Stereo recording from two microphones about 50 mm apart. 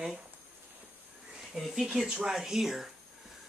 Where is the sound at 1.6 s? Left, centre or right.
Centre.